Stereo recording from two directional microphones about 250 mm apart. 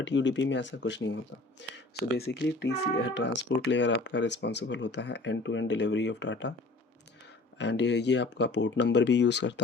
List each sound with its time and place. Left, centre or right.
0.0 s speech: left
7.6 s speech: left